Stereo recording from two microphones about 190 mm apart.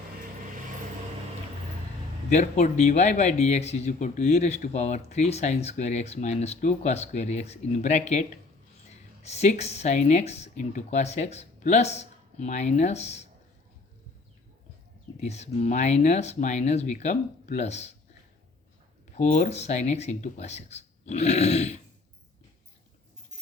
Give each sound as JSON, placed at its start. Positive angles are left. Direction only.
{"t": 2.3, "sound": "speech", "side_deg": 35}
{"t": 15.2, "sound": "speech", "side_deg": 35}
{"t": 19.1, "sound": "speech", "side_deg": 40}